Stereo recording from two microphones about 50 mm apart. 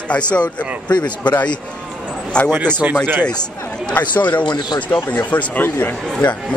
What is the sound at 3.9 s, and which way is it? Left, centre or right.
Speech, left.